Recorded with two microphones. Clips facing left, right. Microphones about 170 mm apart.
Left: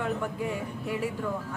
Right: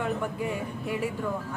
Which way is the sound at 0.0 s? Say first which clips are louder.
Right 1 dB; 15° right (ahead or behind).